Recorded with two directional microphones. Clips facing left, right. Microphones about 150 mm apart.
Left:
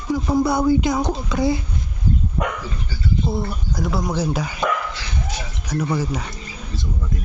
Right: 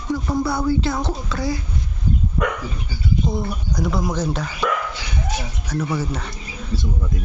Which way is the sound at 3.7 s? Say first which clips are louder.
Even; centre (ahead or behind).